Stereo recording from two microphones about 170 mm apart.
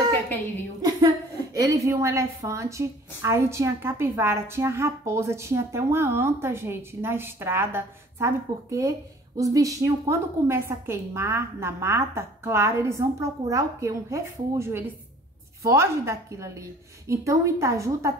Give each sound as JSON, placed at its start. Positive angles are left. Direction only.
{"t": 0.8, "sound": "a woman's voice", "side_deg": -20}